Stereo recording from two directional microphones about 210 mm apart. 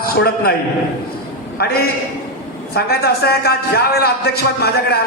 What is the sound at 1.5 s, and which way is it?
A man's voice, 45° left (ahead or behind).